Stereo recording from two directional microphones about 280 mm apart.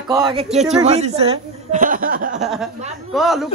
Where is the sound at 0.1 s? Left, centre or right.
Centre.